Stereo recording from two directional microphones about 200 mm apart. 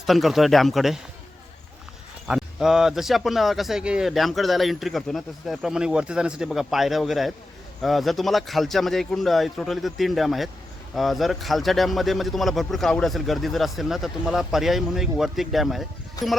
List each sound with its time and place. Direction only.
0.0 s speech: centre (ahead or behind)
2.2 s speech: 5° right (ahead or behind)